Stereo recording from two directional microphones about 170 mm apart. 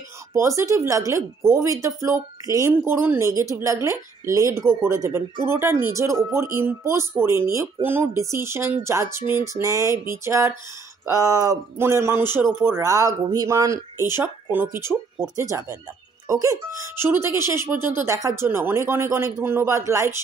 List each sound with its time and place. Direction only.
0.3 s speech: 15° right (ahead or behind)
16.3 s speech: 15° right (ahead or behind)